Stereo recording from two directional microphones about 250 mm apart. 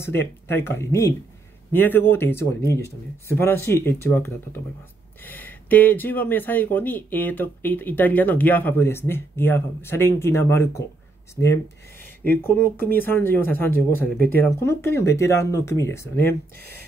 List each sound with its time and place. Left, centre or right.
0.0 s speech: centre